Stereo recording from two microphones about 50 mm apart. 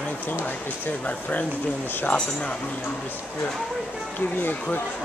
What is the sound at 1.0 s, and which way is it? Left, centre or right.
Speech, left.